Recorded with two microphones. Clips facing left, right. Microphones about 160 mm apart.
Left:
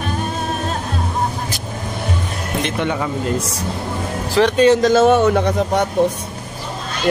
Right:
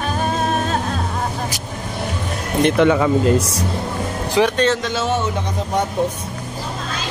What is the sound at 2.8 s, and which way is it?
Speech, 90° right.